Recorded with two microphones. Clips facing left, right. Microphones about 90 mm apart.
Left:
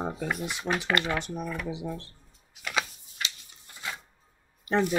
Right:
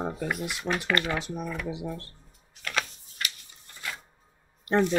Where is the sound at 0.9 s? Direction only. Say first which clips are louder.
Even; 20° left (ahead or behind).